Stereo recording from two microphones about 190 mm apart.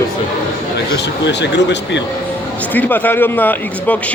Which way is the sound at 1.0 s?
65° left (ahead or behind).